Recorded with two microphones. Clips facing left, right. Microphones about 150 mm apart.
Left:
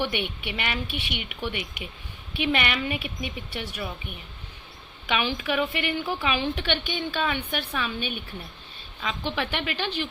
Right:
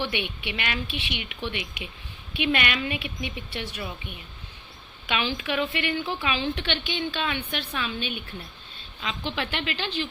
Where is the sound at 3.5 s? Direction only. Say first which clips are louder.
Even; 10° left (ahead or behind).